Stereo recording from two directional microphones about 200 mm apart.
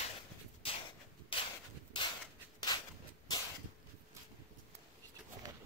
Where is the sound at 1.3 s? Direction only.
25° left (ahead or behind).